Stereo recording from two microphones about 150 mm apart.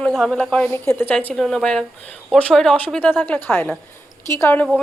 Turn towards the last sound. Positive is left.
turn(degrees=15)  # may be behind; listen again after turning